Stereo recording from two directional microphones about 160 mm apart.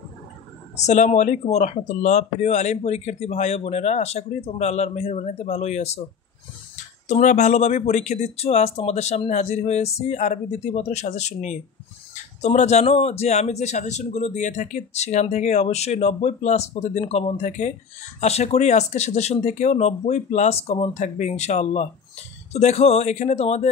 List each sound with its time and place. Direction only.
0.7 s a man's voice: 45° left (ahead or behind)
7.1 s a man's voice: 50° left (ahead or behind)